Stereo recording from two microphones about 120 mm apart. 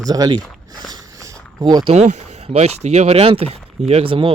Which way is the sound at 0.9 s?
25° right (ahead or behind).